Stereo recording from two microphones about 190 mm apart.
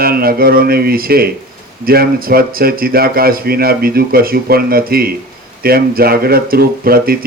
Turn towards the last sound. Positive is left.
turn(degrees=-50)  # may be behind; listen again after turning